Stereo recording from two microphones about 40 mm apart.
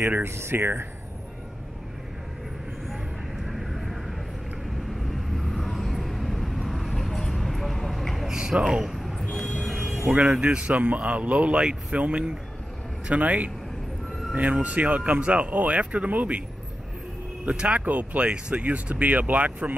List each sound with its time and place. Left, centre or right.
0.0 s speech: right
3.4 s vehicle: centre
8.3 s speech: centre
9.7 s a sound: centre
10.3 s speech: right
10.6 s speech: right
11.5 s speech: right
17.5 s speech: right
17.8 s speech: right
18.2 s speech: right
18.6 s speech: right